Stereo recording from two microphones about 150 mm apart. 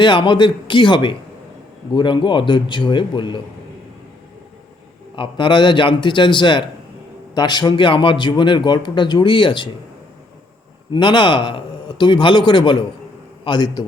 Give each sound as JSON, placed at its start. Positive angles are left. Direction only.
{"t": 0.0, "sound": "a man's voice", "side_deg": 35}
{"t": 5.1, "sound": "a man's voice", "side_deg": 35}
{"t": 10.9, "sound": "a man's voice", "side_deg": 30}